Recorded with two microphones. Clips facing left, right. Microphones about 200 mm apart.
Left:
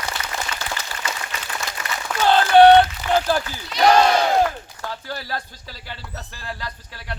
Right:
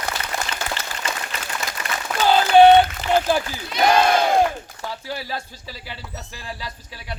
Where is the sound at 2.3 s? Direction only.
5° right (ahead or behind).